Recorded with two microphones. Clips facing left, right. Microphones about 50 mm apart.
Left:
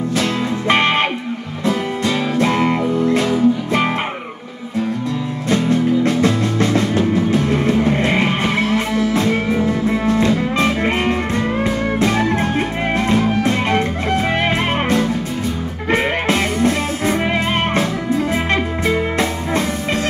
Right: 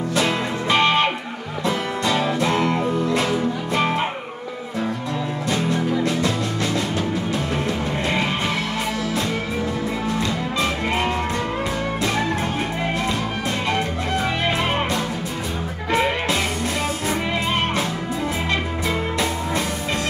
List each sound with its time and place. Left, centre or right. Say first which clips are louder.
0.7 s music: left 2 dB; left
2.5 s music: left 3 dB; left
3.2 s music: left 6 dB; centre
6.0 s music: left 6 dB; left
12.0 s music: left 6 dB; left
15.9 s music: left 3 dB; left